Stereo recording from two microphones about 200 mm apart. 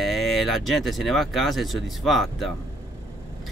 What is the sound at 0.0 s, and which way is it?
Speech, centre (ahead or behind).